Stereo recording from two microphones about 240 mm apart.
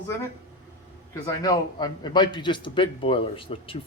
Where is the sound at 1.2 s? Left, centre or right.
Centre.